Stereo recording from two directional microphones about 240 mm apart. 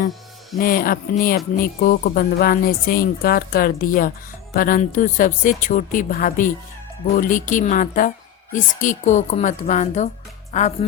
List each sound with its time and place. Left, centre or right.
0.6 s a woman's voice: left